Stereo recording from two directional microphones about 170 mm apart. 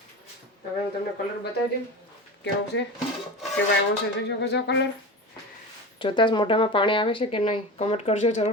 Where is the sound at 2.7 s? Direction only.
90° left.